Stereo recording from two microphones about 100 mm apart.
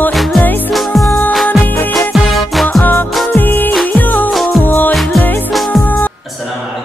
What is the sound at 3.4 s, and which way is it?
Music, 20° left (ahead or behind).